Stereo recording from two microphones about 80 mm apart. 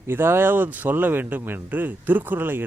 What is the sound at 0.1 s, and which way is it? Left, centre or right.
Speech, right.